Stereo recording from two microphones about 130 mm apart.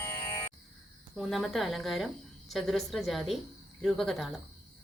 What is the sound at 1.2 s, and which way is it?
A woman's voice, centre (ahead or behind).